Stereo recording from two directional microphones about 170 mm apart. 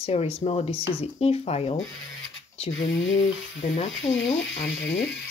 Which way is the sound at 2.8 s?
90° left.